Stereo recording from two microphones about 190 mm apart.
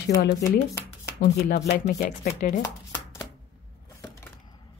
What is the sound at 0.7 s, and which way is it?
Shuffling cards, 15° left (ahead or behind).